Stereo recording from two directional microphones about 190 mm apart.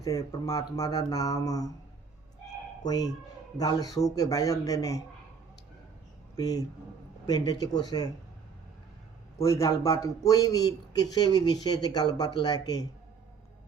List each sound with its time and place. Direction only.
0.0 s a man's voice: 15° left (ahead or behind)
2.8 s a man's voice: 20° left (ahead or behind)
6.3 s a man's voice: 20° left (ahead or behind)
9.4 s a man's voice: 15° left (ahead or behind)